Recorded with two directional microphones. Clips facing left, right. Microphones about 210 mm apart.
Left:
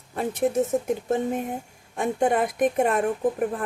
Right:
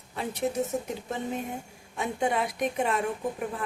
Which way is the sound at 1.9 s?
50° left (ahead or behind).